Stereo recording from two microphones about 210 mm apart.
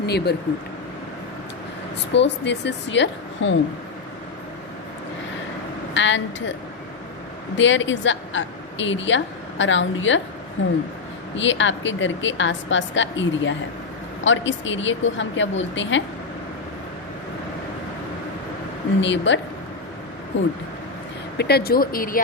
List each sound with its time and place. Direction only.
0.0 s speech: 50° left (ahead or behind)
2.1 s a woman's voice: 55° left (ahead or behind)
5.9 s a woman's voice: 60° left (ahead or behind)
7.5 s a woman's voice: 60° left (ahead or behind)
18.9 s a woman's voice: 60° left (ahead or behind)
21.3 s speech: 50° left (ahead or behind)